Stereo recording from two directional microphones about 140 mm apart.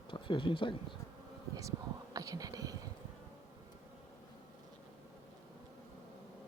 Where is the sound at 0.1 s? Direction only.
35° left (ahead or behind).